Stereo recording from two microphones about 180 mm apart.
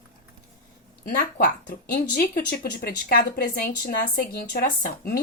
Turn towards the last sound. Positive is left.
turn(degrees=55)  # may be behind; listen again after turning